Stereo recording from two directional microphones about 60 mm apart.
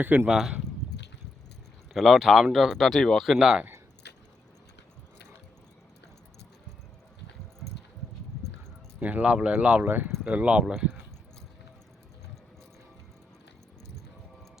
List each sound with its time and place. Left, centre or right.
0.3 s speech: centre
1.9 s speech: centre
3.3 s speech: centre
9.0 s speech: right
10.2 s speech: right